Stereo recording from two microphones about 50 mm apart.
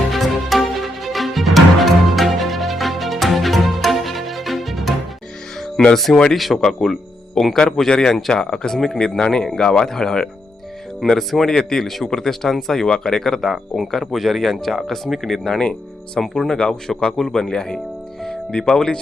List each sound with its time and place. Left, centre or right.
0.1 s music: centre
5.7 s speech: centre
13.5 s speech: centre
16.2 s speech: centre
16.5 s speech: centre
17.5 s speech: centre